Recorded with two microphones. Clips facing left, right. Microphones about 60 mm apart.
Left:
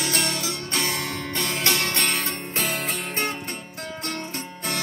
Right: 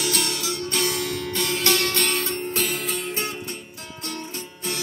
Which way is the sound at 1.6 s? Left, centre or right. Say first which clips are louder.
Right 2 dB; left.